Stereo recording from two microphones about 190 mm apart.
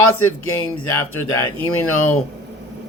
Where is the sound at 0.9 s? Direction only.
15° left (ahead or behind).